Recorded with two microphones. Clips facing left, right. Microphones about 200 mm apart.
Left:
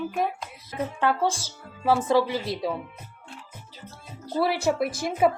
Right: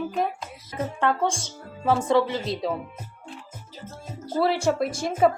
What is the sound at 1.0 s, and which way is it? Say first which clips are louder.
Speech: even; 5° left (ahead or behind).